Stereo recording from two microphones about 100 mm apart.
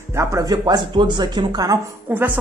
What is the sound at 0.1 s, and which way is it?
Speech, 30° right (ahead or behind).